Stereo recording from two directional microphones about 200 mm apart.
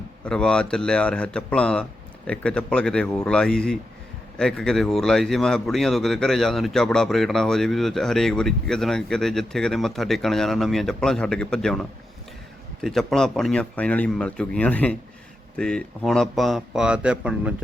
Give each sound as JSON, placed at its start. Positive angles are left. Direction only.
{"t": 0.3, "sound": "speech", "side_deg": 5}